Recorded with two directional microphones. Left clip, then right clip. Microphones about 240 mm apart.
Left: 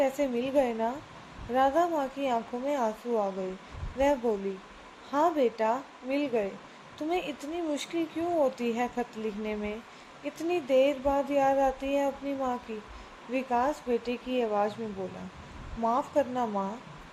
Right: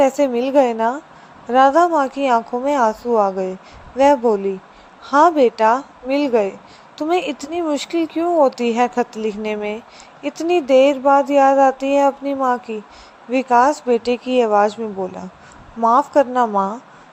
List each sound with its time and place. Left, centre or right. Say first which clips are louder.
0.0 s speech: right 12 dB; right
15.8 s speech: right 14 dB; right